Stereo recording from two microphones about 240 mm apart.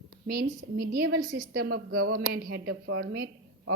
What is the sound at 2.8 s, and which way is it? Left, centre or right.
Speech, right.